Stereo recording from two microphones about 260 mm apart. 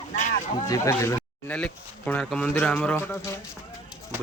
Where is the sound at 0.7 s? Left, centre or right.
Centre.